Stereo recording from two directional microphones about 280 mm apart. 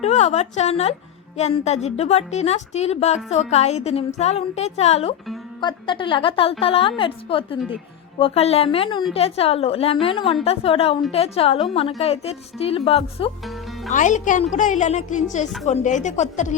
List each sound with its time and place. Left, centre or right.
0.0 s a woman's voice: left